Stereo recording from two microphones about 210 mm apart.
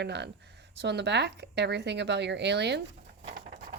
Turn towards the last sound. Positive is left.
turn(degrees=-40)  # may be behind; listen again after turning